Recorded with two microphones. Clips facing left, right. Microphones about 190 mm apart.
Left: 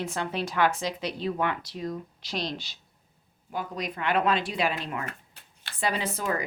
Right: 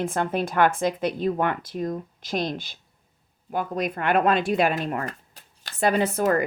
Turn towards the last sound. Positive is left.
turn(degrees=-55)  # may be behind; listen again after turning